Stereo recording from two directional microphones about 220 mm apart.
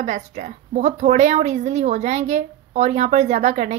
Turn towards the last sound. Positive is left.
turn(degrees=-30)  # may be behind; listen again after turning